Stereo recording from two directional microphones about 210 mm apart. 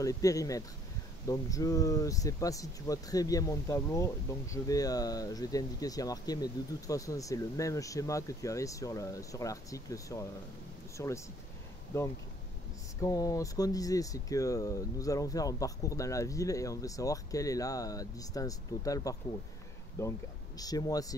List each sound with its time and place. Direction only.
0.0 s speech: 15° left (ahead or behind)